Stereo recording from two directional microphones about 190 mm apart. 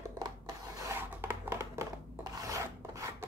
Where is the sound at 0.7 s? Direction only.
15° right (ahead or behind).